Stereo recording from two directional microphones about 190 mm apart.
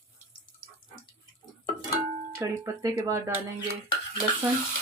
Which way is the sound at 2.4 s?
15° right (ahead or behind).